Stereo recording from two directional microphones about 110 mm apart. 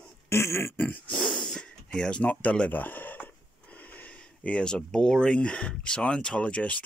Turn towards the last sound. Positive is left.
turn(degrees=10)  # may be behind; listen again after turning